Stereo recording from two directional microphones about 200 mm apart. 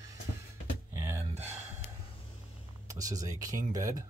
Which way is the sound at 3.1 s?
15° right (ahead or behind).